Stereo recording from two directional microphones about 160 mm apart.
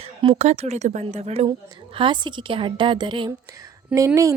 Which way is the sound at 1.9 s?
30° right (ahead or behind).